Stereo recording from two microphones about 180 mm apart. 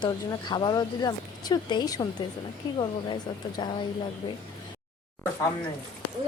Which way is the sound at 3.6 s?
25° left (ahead or behind).